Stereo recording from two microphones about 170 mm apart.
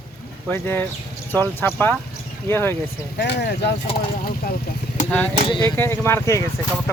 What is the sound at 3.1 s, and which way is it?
Speech, 80° left.